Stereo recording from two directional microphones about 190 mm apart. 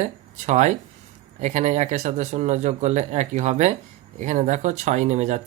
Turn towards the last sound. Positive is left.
turn(degrees=-35)  # may be behind; listen again after turning